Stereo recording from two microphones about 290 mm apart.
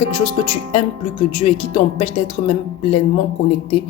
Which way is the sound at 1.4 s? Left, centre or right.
Left.